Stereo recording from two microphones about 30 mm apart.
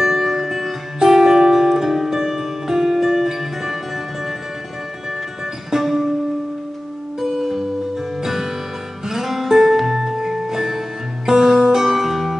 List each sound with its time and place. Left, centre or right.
0.2 s music: centre
5.9 s music: centre
7.2 s music: centre